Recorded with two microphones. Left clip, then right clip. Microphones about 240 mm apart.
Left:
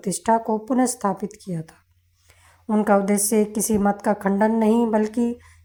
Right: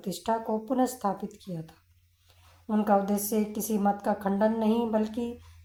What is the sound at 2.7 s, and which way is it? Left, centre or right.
Speech, left.